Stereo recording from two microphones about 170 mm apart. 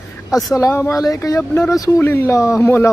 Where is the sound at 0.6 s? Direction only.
15° left (ahead or behind).